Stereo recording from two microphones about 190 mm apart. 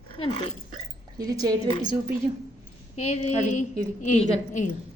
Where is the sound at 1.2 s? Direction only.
20° right (ahead or behind).